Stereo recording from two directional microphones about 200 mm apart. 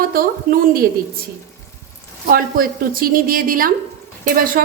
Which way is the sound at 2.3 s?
45° right (ahead or behind).